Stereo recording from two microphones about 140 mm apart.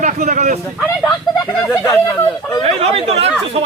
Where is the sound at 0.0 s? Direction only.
60° right (ahead or behind).